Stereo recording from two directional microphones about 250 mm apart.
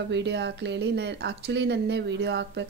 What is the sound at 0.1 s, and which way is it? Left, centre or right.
Speech, right.